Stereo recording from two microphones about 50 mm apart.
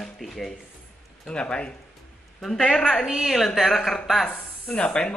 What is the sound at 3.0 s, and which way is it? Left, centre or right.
Speech, centre.